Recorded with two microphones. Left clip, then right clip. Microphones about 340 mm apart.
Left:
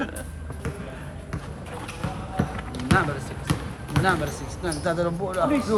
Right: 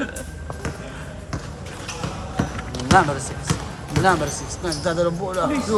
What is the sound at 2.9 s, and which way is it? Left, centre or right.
Speech, centre.